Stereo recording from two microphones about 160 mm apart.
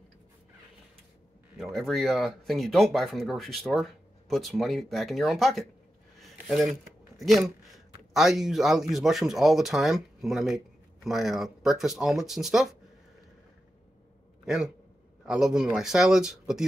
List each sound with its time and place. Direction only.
1.6 s speech: centre (ahead or behind)
7.2 s a sound: centre (ahead or behind)
8.1 s speech: centre (ahead or behind)
14.4 s a man's voice: 5° right (ahead or behind)